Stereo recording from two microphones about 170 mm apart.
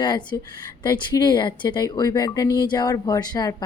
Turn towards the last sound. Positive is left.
turn(degrees=25)  # may be behind; listen again after turning